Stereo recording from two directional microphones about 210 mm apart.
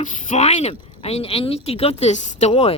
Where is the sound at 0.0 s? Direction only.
35° left (ahead or behind).